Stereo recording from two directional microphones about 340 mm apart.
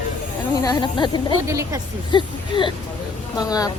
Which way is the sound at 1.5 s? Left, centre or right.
Centre.